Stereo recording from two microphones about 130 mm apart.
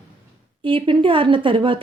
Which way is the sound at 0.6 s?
40° right (ahead or behind).